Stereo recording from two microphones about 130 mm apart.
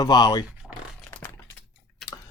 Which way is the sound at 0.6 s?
10° left (ahead or behind).